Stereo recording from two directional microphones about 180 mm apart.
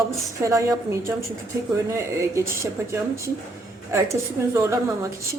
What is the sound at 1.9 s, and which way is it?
Speech, 15° right (ahead or behind).